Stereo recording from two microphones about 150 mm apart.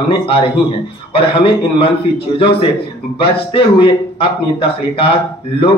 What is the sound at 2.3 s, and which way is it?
Speech, 35° left (ahead or behind).